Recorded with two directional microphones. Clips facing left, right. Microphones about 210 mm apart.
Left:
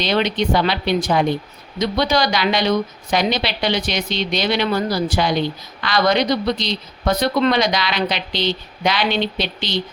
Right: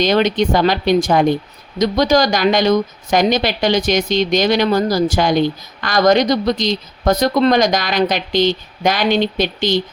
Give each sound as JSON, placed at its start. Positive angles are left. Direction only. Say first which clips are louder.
{"t": 0.0, "sound": "a woman's voice", "louder": "right 5 dB", "side_deg": -45}